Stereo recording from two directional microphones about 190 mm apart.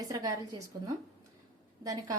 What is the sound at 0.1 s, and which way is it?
Speech, 20° right (ahead or behind).